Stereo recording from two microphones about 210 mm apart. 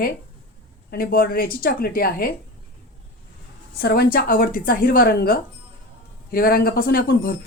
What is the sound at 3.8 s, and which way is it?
Speech, 45° left (ahead or behind).